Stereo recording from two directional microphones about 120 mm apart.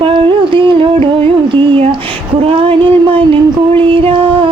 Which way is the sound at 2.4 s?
45° right (ahead or behind).